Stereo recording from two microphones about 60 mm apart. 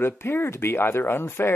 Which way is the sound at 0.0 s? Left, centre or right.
Left.